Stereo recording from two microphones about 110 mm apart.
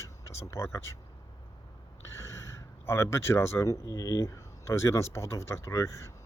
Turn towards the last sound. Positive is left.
turn(degrees=25)  # may be behind; listen again after turning